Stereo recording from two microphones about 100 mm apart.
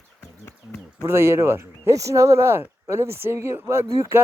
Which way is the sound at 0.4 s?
25° left (ahead or behind).